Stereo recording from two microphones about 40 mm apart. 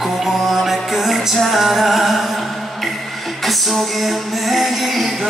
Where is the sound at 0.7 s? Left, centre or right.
Centre.